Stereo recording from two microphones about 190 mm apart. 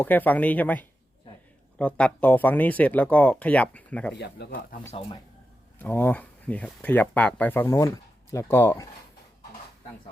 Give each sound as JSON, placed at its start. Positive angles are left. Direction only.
{"t": 0.0, "sound": "speech", "side_deg": 10}
{"t": 4.7, "sound": "speech", "side_deg": 35}
{"t": 5.8, "sound": "speech", "side_deg": 10}